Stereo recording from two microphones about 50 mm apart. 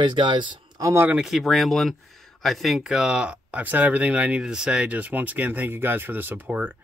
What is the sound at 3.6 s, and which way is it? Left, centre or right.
Speech, right.